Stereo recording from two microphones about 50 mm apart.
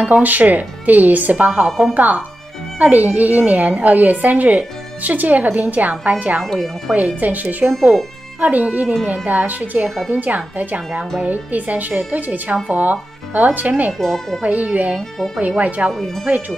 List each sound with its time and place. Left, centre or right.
0.0 s a woman's voice: right
6.4 s speech: centre
7.0 s a woman's voice: right
9.8 s speech: centre
10.1 s a woman's voice: right
13.9 s speech: centre
14.4 s a woman's voice: right
15.0 s speech: centre
15.4 s a woman's voice: right
15.9 s speech: centre
16.3 s a woman's voice: right